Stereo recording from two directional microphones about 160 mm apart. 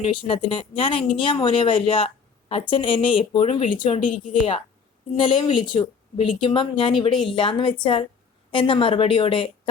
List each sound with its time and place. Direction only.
0.1 s speech: 35° left (ahead or behind)